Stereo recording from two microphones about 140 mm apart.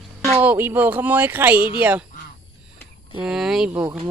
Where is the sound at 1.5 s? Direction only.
90° right.